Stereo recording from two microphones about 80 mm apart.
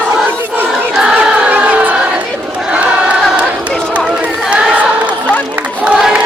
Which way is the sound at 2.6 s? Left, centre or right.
Centre.